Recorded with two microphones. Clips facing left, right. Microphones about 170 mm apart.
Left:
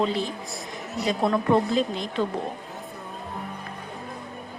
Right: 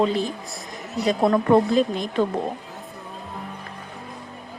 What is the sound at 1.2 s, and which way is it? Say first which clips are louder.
A woman's voice: right 4 dB; 45° right (ahead or behind).